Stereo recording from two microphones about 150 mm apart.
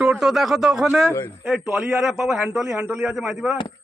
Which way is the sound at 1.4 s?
10° right (ahead or behind).